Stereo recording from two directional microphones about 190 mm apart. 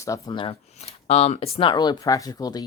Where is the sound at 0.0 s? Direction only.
20° left (ahead or behind).